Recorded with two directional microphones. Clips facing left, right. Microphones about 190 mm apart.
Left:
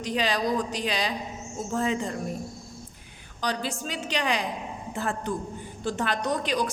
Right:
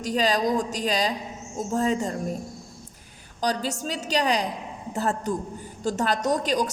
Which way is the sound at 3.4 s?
40° right (ahead or behind).